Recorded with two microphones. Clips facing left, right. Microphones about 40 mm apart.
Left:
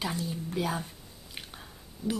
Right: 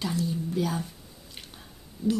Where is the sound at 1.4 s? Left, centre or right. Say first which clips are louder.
Left 3 dB; centre.